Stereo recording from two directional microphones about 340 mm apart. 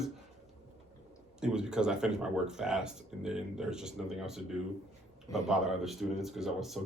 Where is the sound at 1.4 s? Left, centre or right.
Centre.